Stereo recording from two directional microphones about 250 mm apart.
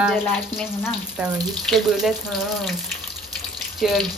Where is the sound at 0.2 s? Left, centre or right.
Centre.